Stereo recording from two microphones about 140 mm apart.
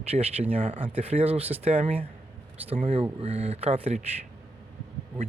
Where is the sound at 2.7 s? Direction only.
45° right (ahead or behind).